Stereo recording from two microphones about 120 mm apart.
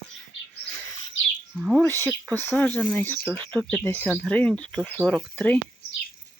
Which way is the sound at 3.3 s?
35° right (ahead or behind).